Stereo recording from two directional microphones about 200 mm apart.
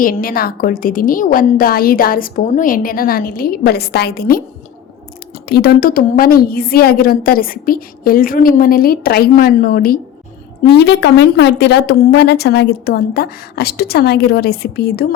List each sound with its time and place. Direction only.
0.0 s a woman's voice: 45° left (ahead or behind)
5.5 s a woman's voice: 50° left (ahead or behind)
10.7 s a woman's voice: 55° left (ahead or behind)